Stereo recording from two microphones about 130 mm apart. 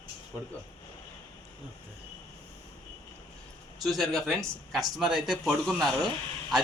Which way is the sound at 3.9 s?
Centre (ahead or behind).